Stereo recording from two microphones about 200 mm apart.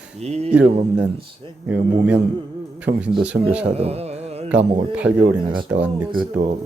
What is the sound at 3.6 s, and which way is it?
Carnatic music, 30° right (ahead or behind).